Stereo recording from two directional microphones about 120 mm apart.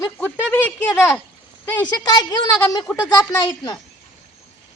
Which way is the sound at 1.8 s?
35° left (ahead or behind).